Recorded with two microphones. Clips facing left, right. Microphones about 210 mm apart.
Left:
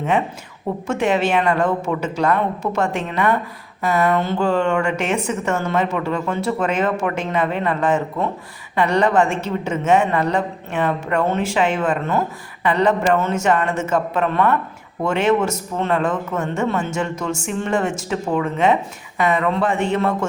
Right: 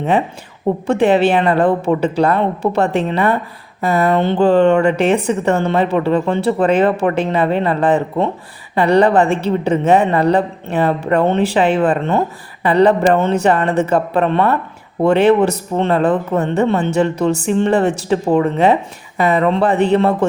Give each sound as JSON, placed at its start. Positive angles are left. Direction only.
{"t": 0.9, "sound": "a man's voice", "side_deg": -35}